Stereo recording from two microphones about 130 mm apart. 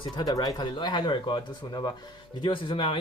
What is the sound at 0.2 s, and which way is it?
Speech, 30° left (ahead or behind).